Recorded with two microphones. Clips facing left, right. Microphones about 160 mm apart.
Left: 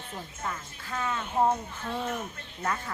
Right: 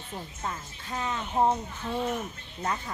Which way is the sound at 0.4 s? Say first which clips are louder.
Left 1 dB; 25° right (ahead or behind).